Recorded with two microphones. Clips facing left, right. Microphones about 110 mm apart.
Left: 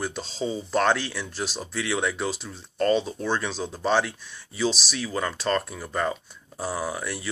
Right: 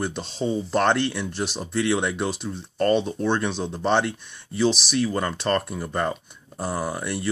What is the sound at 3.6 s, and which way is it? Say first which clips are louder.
Speech: even; 5° left (ahead or behind).